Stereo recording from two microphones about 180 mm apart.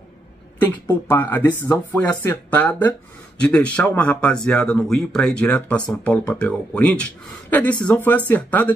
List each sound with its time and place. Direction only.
0.6 s speech: 10° left (ahead or behind)